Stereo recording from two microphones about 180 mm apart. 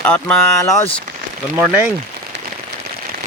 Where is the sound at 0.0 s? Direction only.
5° left (ahead or behind).